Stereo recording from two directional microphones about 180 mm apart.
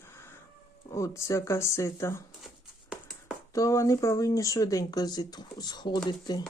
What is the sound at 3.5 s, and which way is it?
Speech, 15° left (ahead or behind).